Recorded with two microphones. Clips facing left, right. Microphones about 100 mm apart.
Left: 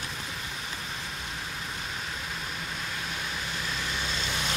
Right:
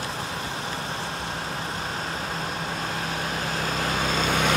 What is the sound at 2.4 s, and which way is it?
Vehicle, 45° right (ahead or behind).